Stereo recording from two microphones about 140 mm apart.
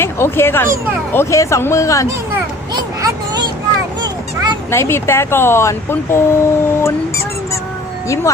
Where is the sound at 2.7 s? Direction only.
25° right (ahead or behind).